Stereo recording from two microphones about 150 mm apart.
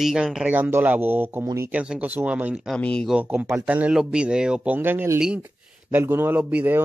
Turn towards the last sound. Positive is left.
turn(degrees=-10)  # may be behind; listen again after turning